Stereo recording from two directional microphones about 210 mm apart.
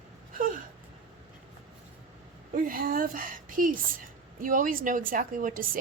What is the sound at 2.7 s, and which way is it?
A woman's voice, 45° right (ahead or behind).